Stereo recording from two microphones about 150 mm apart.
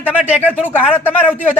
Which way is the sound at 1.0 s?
10° left (ahead or behind).